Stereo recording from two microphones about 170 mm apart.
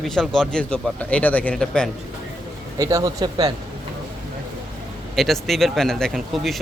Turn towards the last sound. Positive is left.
turn(degrees=0)  # may be behind; listen again after turning